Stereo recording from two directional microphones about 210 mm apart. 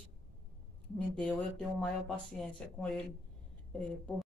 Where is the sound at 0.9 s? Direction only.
5° left (ahead or behind).